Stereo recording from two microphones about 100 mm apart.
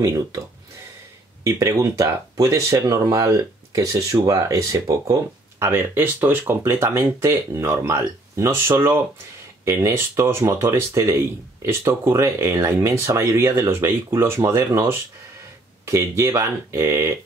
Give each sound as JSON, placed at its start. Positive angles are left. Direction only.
{"t": 1.4, "sound": "speech", "side_deg": -30}